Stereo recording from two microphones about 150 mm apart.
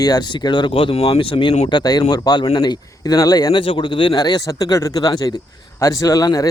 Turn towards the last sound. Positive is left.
turn(degrees=20)  # may be behind; listen again after turning